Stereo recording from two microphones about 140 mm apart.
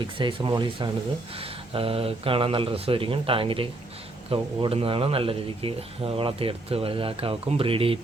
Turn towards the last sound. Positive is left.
turn(degrees=-40)  # may be behind; listen again after turning